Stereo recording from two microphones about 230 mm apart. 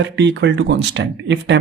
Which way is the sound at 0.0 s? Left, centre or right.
Right.